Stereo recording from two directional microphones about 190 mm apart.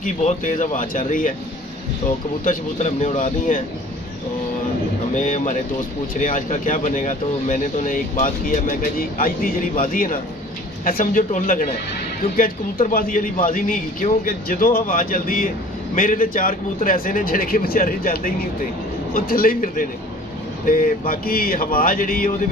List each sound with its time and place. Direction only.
0.0 s a man's voice: 40° left (ahead or behind)
2.4 s speech: 40° left (ahead or behind)
5.1 s a man's voice: 40° left (ahead or behind)
12.8 s a man's voice: 45° left (ahead or behind)